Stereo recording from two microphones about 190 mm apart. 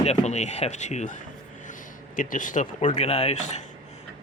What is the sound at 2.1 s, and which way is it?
Speech, 45° left (ahead or behind).